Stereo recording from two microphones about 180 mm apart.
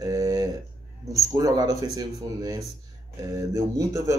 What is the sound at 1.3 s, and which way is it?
Speech, 20° right (ahead or behind).